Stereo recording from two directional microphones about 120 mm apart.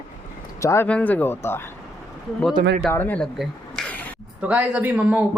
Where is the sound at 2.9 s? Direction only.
15° left (ahead or behind).